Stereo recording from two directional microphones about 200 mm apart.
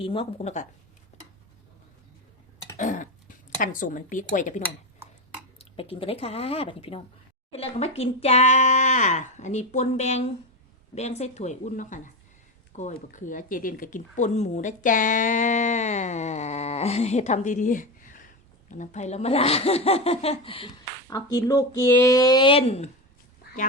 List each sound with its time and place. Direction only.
0.0 s speech: 25° left (ahead or behind)
2.7 s cough: 40° left (ahead or behind)
3.6 s speech: 40° left (ahead or behind)
5.7 s speech: 30° left (ahead or behind)